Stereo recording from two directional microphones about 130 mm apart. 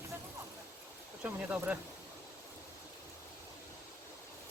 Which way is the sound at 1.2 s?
10° right (ahead or behind).